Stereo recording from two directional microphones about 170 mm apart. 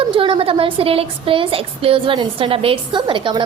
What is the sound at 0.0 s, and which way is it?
A woman's voice, 30° right (ahead or behind).